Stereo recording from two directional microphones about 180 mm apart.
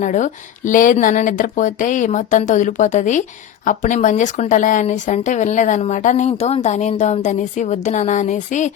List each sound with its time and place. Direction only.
0.0 s speech: 45° left (ahead or behind)